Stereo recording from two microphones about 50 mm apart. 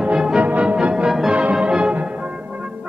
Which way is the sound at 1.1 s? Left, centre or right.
Centre.